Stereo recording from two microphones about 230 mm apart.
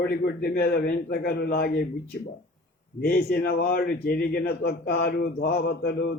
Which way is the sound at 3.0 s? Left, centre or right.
Left.